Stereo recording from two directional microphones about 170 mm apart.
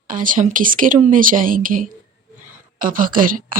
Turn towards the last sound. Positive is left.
turn(degrees=-55)  # may be behind; listen again after turning